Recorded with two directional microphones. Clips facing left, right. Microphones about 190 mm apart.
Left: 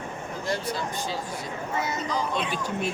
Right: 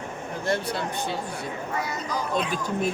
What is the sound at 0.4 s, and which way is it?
Speech, 60° right (ahead or behind).